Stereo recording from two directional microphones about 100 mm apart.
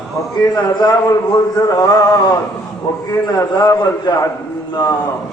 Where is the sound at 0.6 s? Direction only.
45° left (ahead or behind).